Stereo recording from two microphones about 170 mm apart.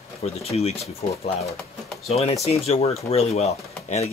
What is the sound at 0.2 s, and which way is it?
Speech, 40° left (ahead or behind).